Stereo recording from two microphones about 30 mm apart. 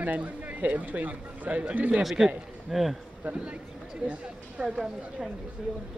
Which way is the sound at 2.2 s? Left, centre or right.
Centre.